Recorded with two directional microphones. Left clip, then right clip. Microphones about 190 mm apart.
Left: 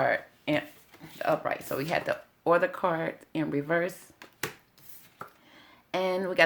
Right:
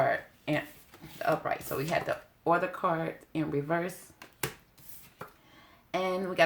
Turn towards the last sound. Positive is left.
turn(degrees=35)  # may be behind; listen again after turning